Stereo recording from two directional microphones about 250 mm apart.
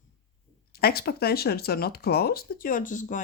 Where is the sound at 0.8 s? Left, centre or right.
Left.